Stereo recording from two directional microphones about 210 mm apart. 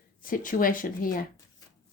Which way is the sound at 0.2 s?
40° left (ahead or behind).